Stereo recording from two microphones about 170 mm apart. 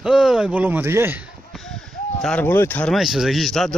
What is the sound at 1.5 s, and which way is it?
Speech, 5° left (ahead or behind).